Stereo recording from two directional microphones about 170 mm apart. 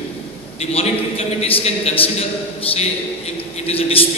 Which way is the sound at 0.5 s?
40° left (ahead or behind).